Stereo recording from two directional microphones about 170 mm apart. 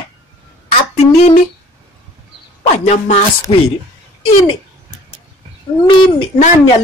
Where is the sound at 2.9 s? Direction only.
40° left (ahead or behind).